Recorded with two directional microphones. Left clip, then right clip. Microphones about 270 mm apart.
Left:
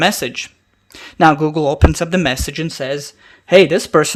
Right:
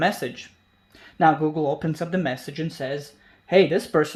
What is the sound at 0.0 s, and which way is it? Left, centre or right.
Speech, left.